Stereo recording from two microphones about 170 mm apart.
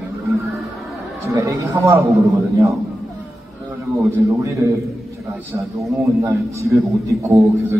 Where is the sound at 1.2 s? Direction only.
15° right (ahead or behind).